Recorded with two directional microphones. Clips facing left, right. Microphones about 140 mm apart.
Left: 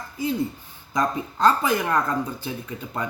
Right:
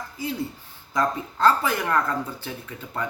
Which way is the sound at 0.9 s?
20° left (ahead or behind).